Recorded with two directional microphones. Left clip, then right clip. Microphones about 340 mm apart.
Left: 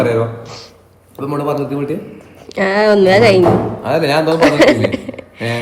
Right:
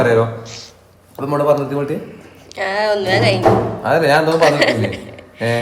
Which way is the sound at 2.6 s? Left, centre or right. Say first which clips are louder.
Left 6 dB; centre.